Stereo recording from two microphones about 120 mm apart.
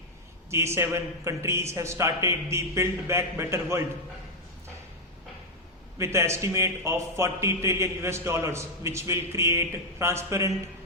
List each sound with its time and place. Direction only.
0.5 s a man's voice: 25° right (ahead or behind)
6.0 s a man's voice: 25° right (ahead or behind)